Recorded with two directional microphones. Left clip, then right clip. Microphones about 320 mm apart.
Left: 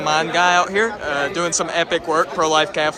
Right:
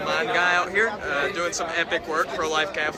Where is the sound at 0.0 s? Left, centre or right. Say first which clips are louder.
Left 5 dB; centre.